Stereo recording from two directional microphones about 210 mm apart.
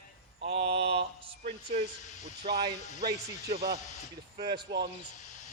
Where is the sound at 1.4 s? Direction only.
45° right (ahead or behind).